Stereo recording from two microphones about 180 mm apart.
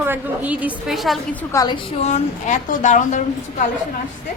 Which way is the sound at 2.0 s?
40° left (ahead or behind).